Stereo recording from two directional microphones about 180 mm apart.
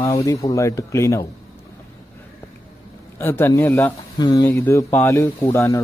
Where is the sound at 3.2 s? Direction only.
10° left (ahead or behind).